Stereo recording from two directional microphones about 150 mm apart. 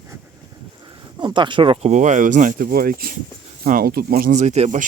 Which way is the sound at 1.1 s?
30° right (ahead or behind).